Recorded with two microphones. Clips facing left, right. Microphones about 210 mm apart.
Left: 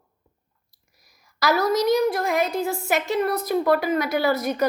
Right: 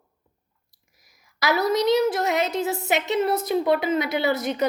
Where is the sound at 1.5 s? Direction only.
20° right (ahead or behind).